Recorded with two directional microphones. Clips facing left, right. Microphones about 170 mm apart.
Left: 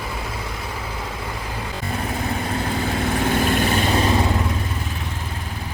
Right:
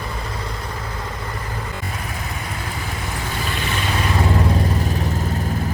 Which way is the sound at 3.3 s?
50° left (ahead or behind).